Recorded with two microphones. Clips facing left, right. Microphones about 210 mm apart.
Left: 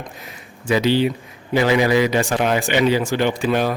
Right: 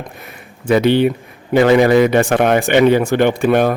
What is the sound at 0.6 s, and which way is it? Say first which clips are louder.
Speech: right 5 dB; 55° right (ahead or behind).